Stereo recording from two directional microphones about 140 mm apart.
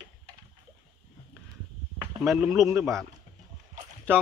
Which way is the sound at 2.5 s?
20° right (ahead or behind).